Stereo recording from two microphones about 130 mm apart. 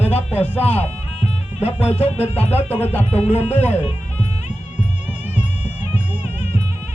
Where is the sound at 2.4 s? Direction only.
50° left (ahead or behind).